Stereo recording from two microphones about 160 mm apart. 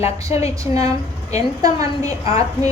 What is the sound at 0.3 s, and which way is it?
A woman's voice, 20° right (ahead or behind).